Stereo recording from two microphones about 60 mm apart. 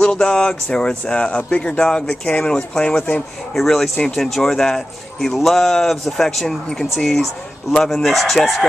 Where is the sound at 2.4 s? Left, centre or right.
Centre.